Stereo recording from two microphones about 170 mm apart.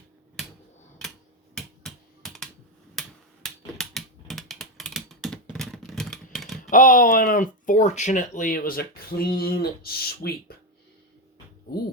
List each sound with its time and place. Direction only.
1.5 s computer keyboard: centre (ahead or behind)
2.9 s finger snapping: centre (ahead or behind)
3.8 s typing: centre (ahead or behind)
6.7 s speech: 50° left (ahead or behind)